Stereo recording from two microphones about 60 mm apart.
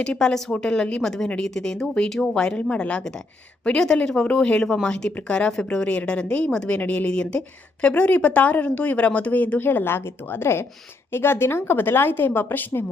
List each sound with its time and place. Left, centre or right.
0.0 s a woman's voice: centre; by 12.8 s left